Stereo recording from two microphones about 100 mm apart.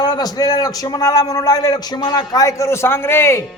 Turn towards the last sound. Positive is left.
turn(degrees=25)  # may be behind; listen again after turning